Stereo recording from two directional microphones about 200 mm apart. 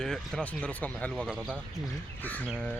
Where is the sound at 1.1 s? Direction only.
5° right (ahead or behind).